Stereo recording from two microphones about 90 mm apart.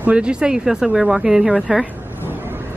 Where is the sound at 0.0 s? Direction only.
10° right (ahead or behind).